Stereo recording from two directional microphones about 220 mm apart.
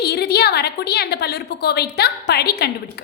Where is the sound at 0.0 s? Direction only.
45° left (ahead or behind).